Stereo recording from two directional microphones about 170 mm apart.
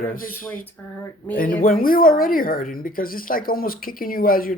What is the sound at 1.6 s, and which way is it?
Speech, 55° left (ahead or behind).